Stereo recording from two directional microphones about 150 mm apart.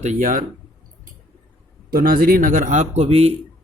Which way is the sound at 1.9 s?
75° right (ahead or behind).